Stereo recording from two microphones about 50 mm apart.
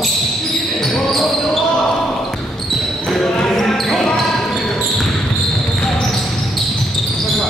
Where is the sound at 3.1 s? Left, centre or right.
Centre.